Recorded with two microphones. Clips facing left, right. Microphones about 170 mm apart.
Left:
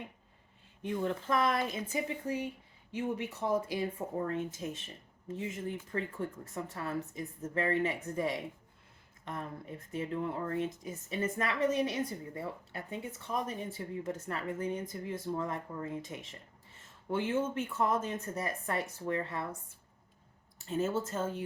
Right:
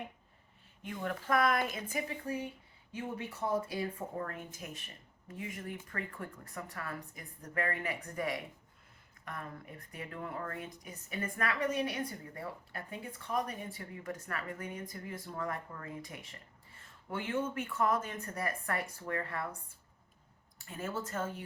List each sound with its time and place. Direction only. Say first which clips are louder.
0.8 s speech: left 5 dB; 25° left (ahead or behind)
3.7 s speech: left 3 dB; 25° left (ahead or behind)
20.7 s speech: left 7 dB; 25° left (ahead or behind)